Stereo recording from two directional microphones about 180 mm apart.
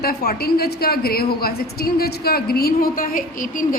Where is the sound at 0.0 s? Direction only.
60° left (ahead or behind).